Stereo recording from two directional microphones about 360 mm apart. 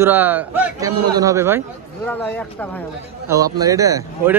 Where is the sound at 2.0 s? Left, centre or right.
Centre.